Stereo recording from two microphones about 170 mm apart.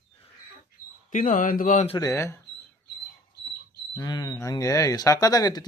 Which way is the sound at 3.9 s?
20° left (ahead or behind).